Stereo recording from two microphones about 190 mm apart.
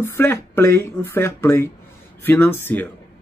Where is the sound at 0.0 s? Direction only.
10° left (ahead or behind).